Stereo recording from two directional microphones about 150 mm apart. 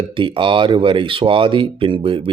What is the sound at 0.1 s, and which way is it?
Speech, 35° right (ahead or behind).